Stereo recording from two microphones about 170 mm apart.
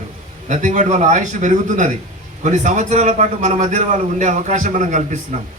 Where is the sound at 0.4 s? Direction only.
45° right (ahead or behind).